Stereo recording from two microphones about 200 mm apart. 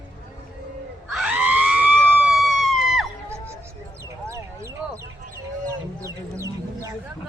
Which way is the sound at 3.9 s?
15° right (ahead or behind).